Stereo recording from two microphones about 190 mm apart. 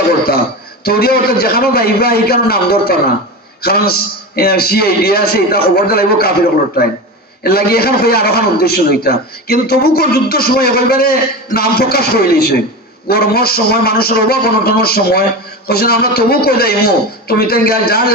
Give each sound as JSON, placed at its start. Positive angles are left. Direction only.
{"t": 0.9, "sound": "a man's voice", "side_deg": 55}
{"t": 7.4, "sound": "a man's voice", "side_deg": 55}